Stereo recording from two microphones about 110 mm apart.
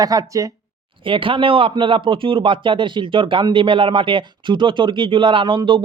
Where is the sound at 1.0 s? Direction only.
50° right (ahead or behind).